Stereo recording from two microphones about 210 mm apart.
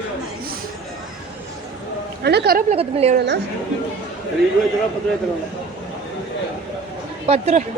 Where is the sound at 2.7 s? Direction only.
30° right (ahead or behind).